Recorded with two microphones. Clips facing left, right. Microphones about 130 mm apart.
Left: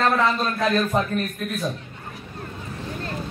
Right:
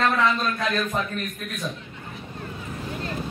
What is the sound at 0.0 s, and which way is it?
A man's voice, 35° left (ahead or behind).